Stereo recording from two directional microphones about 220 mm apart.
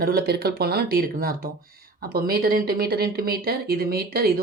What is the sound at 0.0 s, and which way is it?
A woman's voice, 45° right (ahead or behind).